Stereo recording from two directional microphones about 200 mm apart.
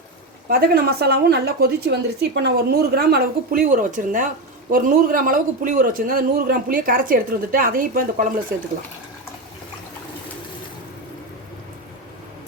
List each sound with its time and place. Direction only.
0.4 s a woman's voice: 50° right (ahead or behind)